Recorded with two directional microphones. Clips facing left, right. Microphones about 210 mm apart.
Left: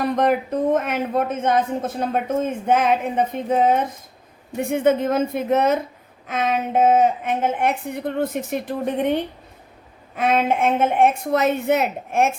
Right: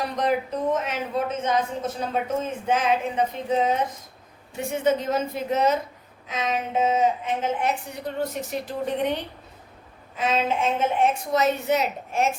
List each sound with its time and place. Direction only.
0.0 s speech: 55° left (ahead or behind)